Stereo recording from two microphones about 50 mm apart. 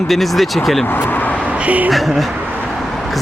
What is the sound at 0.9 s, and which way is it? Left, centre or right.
Vehicle, left.